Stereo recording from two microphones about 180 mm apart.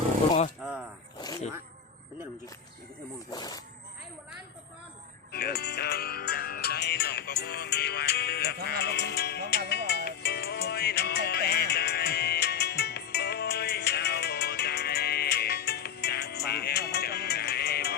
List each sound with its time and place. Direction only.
0.6 s a sound: 5° right (ahead or behind)
3.2 s wild animals: 20° left (ahead or behind)
5.3 s music: 60° left (ahead or behind)